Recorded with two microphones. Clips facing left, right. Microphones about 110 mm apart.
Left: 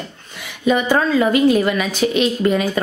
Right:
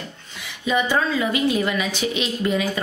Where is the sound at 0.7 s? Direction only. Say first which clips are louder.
Left 5 dB; 55° left (ahead or behind).